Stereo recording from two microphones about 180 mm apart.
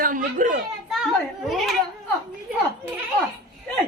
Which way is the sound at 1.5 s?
Centre (ahead or behind).